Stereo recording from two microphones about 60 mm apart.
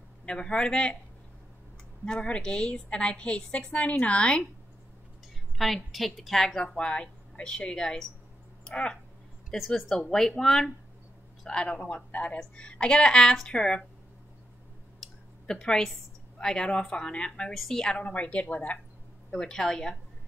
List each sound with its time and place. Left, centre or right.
0.2 s a woman's voice: centre
2.0 s a woman's voice: centre
5.6 s a woman's voice: centre
8.6 s a sound: centre
9.5 s a woman's voice: centre
15.0 s a sound: centre
16.3 s a woman's voice: centre
19.3 s a woman's voice: centre